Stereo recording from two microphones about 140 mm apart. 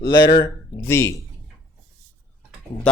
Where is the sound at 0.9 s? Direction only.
20° left (ahead or behind).